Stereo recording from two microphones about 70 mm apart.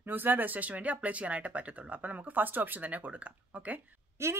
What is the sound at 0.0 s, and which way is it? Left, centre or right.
Speech, right.